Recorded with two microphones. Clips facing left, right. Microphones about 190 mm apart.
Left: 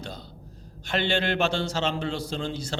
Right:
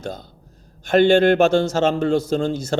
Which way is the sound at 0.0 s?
45° right (ahead or behind).